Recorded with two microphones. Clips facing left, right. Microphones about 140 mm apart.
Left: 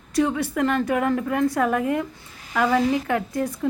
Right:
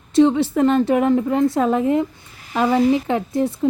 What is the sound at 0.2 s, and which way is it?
Speech, 25° right (ahead or behind).